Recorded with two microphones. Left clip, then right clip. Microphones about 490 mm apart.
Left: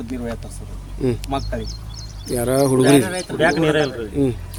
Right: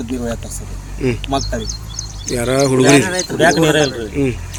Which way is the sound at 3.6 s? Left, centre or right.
Left.